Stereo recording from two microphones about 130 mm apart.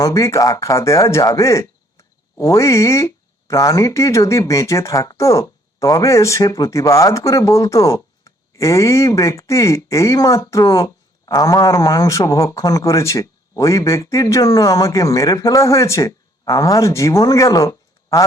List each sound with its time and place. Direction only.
0.0 s speech: 25° left (ahead or behind)